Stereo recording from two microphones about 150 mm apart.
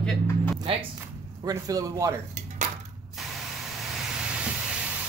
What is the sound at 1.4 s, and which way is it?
Speech, 25° right (ahead or behind).